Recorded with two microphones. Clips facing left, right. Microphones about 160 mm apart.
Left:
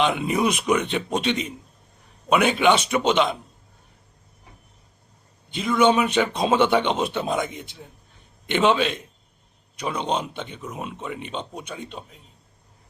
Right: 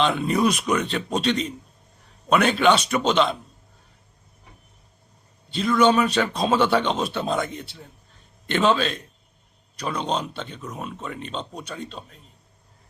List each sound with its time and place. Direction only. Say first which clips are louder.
0.0 s speech: right 1 dB; 15° left (ahead or behind)
0.6 s speech: left 2 dB; 5° left (ahead or behind)
0.9 s speech: even; 15° left (ahead or behind)
5.8 s speech: left 1 dB; 20° left (ahead or behind)
10.0 s speech: left 1 dB; 15° left (ahead or behind)